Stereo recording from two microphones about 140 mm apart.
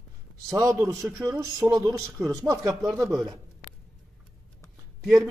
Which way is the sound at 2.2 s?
15° right (ahead or behind).